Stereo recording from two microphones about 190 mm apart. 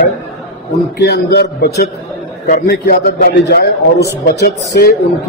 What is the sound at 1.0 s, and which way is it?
A man's voice, 60° left (ahead or behind).